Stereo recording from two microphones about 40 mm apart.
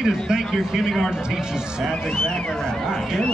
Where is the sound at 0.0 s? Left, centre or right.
Centre.